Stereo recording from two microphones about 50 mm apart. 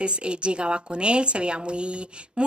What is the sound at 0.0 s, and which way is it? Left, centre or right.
A woman's voice, right.